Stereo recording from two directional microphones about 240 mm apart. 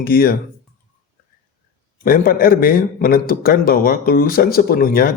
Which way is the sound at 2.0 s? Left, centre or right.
Left.